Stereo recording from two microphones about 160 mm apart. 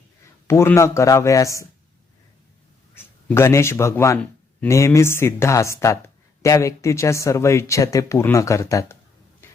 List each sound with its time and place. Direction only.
0.4 s speech: 15° left (ahead or behind)
2.9 s speech: 15° left (ahead or behind)